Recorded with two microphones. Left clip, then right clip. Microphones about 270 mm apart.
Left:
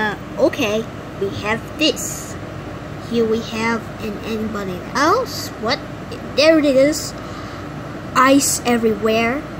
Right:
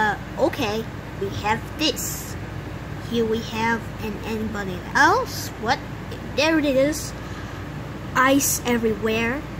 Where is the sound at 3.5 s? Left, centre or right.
Centre.